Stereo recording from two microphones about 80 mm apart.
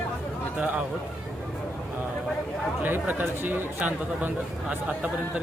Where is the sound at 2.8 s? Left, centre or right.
Right.